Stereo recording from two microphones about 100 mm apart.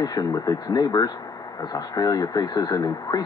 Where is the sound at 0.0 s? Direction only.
35° left (ahead or behind).